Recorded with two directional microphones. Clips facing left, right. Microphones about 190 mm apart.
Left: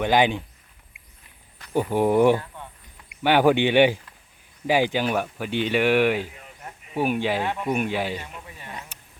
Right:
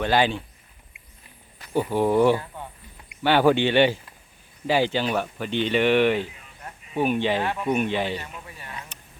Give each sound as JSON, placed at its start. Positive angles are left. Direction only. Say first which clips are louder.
{"t": 0.0, "sound": "speech", "louder": "left 1 dB", "side_deg": 15}
{"t": 1.7, "sound": "speech", "louder": "left 1 dB", "side_deg": 15}
{"t": 8.9, "sound": "a sound", "louder": "right 1 dB", "side_deg": 10}